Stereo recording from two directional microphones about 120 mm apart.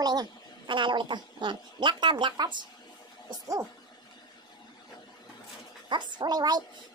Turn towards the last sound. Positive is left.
turn(degrees=-35)  # may be behind; listen again after turning